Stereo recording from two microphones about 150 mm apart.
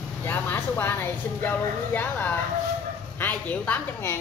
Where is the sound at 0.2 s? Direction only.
15° left (ahead or behind).